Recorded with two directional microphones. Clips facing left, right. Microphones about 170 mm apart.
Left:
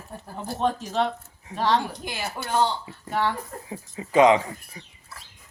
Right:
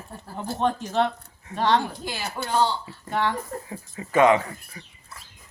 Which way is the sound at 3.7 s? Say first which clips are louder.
Left 1 dB; 15° left (ahead or behind).